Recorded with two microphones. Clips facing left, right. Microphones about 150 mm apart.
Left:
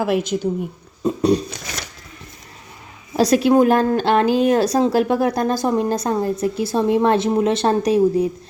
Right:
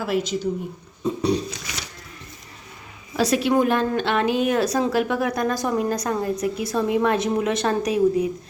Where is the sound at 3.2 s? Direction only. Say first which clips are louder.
Left 5 dB; 40° left (ahead or behind).